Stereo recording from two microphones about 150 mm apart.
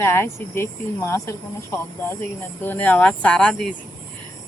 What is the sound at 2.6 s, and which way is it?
Speech, 10° left (ahead or behind).